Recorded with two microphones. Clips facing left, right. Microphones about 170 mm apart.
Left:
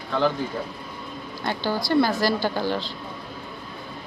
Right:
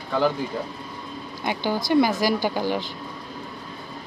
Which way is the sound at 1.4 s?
15° right (ahead or behind).